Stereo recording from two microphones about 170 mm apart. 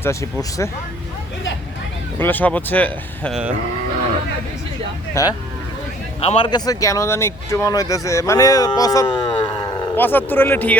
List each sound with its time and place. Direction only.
0.0 s speech: 15° left (ahead or behind)
2.1 s speech: 10° left (ahead or behind)
5.2 s speech: 20° left (ahead or behind)
6.1 s speech: 35° left (ahead or behind)
9.9 s speech: 10° left (ahead or behind)